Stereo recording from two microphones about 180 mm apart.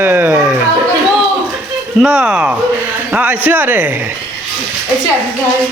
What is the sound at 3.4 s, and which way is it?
Speech, 10° right (ahead or behind).